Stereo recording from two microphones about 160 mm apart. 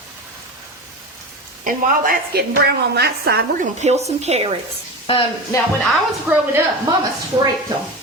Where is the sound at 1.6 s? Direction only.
60° right (ahead or behind); by 3.7 s 85° right.